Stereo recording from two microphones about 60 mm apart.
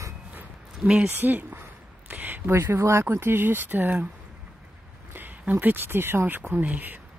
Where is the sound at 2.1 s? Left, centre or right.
Right.